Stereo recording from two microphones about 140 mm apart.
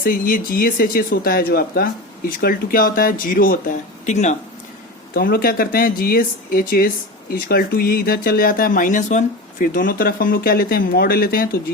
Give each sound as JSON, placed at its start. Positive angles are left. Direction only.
{"t": 0.0, "sound": "speech", "side_deg": 90}
{"t": 4.0, "sound": "speech", "side_deg": 55}
{"t": 5.1, "sound": "speech", "side_deg": 90}